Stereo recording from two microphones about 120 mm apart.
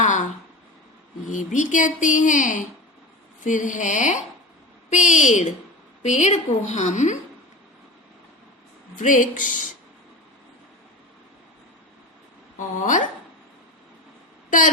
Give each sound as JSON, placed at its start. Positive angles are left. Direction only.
{"t": 0.0, "sound": "a sound", "side_deg": 90}
{"t": 1.3, "sound": "a woman's voice", "side_deg": 90}
{"t": 9.0, "sound": "speech", "side_deg": 90}
{"t": 12.5, "sound": "speech", "side_deg": 90}